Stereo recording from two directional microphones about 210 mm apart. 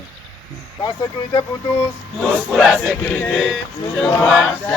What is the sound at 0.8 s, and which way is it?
Speech, 20° left (ahead or behind).